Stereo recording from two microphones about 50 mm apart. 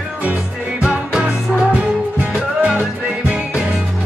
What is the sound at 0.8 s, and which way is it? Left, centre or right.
Music, right.